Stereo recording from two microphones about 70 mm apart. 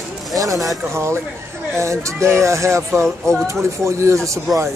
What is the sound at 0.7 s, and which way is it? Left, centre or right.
Speech, right.